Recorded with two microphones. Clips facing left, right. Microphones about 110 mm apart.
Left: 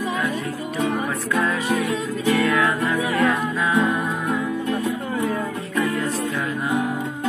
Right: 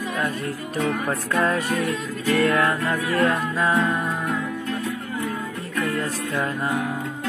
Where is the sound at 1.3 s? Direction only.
45° right (ahead or behind).